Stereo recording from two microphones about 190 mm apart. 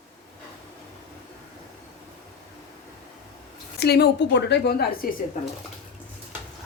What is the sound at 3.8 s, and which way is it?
A woman's voice, 60° left (ahead or behind).